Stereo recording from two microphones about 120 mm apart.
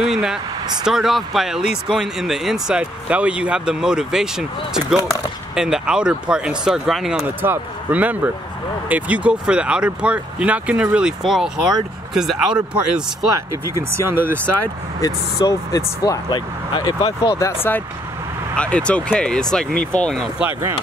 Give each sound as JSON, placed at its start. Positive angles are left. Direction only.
{"t": 0.0, "sound": "speech", "side_deg": -5}
{"t": 7.2, "sound": "speech", "side_deg": -15}
{"t": 13.9, "sound": "speech", "side_deg": -20}
{"t": 15.0, "sound": "speech", "side_deg": 30}
{"t": 16.3, "sound": "speech", "side_deg": 40}